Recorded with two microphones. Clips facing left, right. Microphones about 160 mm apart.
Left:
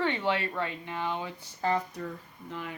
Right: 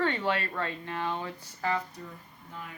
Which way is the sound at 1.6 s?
30° left (ahead or behind).